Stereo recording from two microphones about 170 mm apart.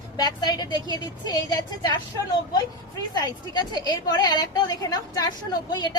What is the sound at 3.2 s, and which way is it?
A woman's voice, 25° left (ahead or behind).